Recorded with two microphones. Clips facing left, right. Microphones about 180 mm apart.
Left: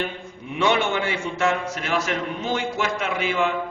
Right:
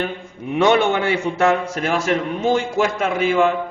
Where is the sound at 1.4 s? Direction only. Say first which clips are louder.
Right 4 dB; 55° right (ahead or behind).